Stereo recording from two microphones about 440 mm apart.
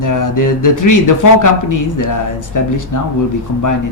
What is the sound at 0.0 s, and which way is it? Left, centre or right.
Speech, left.